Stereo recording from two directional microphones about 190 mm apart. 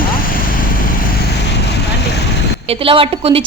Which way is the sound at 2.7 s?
30° right (ahead or behind).